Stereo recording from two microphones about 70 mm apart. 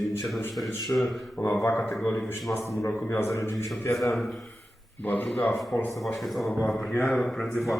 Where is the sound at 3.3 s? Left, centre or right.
Left.